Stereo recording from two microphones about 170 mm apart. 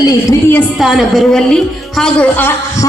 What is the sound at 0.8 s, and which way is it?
A woman's voice, centre (ahead or behind).